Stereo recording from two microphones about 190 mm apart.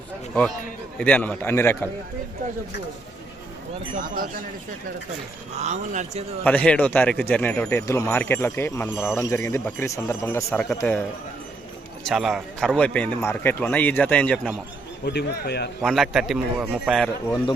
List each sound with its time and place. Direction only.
0.9 s speech: 10° left (ahead or behind)
3.9 s speech: 45° right (ahead or behind)
5.5 s speech: 35° right (ahead or behind)
6.4 s speech: 10° left (ahead or behind)
12.0 s speech: centre (ahead or behind)
15.0 s speech: 60° left (ahead or behind)
15.8 s a man's voice: centre (ahead or behind)